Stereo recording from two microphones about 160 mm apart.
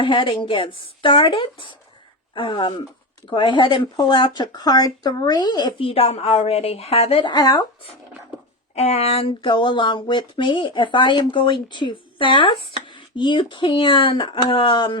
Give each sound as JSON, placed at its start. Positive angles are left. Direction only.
{"t": 0.0, "sound": "speech", "side_deg": 30}
{"t": 5.9, "sound": "speech", "side_deg": 40}
{"t": 8.7, "sound": "speech", "side_deg": 40}